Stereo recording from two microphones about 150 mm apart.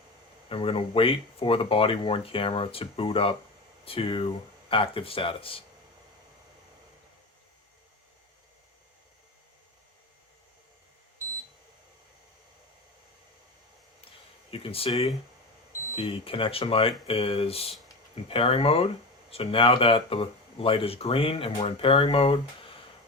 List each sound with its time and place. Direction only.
0.4 s speech: 40° left (ahead or behind)
14.5 s speech: 40° left (ahead or behind)
16.0 s speech: 35° left (ahead or behind)